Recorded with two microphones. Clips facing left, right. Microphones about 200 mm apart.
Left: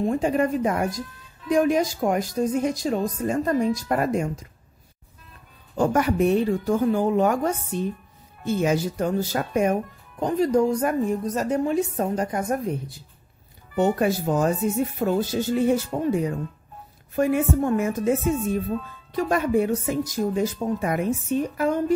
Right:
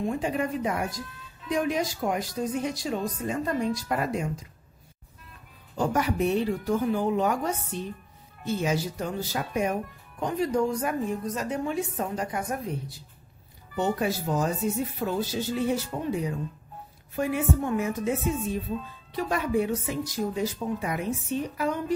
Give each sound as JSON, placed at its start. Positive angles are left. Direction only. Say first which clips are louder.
{"t": 0.0, "sound": "a woman's voice", "louder": "left 6 dB", "side_deg": 45}
{"t": 5.8, "sound": "a woman's voice", "louder": "left 5 dB", "side_deg": 50}
{"t": 13.7, "sound": "a woman's voice", "louder": "left 6 dB", "side_deg": 50}